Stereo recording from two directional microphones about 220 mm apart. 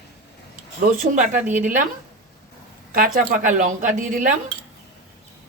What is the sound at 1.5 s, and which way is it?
Speech, 35° right (ahead or behind).